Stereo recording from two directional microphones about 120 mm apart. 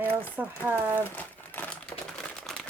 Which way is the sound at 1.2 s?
15° left (ahead or behind).